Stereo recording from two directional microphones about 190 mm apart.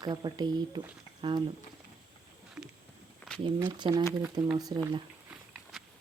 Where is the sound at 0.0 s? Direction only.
20° right (ahead or behind).